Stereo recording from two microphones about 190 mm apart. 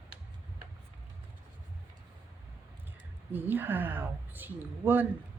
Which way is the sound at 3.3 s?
10° right (ahead or behind).